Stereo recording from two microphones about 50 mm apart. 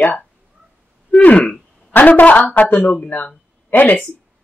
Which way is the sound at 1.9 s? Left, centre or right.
Left.